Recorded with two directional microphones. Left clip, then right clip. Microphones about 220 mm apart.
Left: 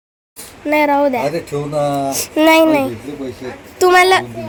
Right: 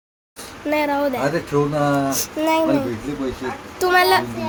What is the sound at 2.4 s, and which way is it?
Speech, 40° left (ahead or behind).